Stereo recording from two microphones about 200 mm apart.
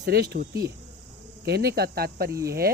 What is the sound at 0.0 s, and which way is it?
Speech, 55° right (ahead or behind).